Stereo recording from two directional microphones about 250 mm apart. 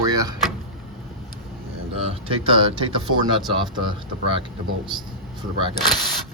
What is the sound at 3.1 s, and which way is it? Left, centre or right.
Speech, right.